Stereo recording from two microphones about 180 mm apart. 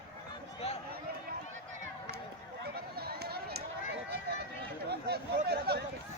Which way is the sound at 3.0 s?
60° right (ahead or behind).